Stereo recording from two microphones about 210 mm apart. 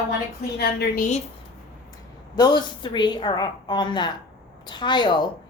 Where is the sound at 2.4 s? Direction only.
20° left (ahead or behind).